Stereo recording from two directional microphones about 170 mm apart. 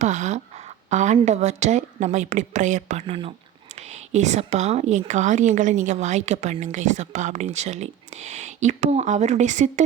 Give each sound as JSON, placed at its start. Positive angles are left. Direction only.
{"t": 0.0, "sound": "a woman's voice", "side_deg": -45}